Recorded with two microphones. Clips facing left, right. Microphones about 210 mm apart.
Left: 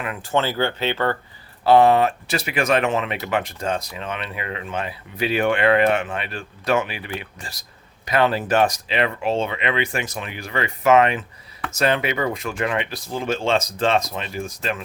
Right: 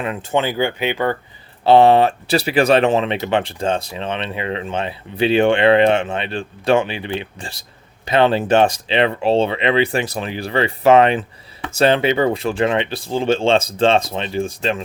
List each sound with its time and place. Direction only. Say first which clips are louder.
0.0 s speech: right 3 dB; 25° right (ahead or behind)
1.6 s speech: right 3 dB; 25° right (ahead or behind)